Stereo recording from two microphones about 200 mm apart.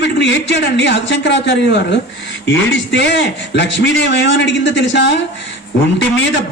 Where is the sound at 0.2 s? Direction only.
60° left (ahead or behind).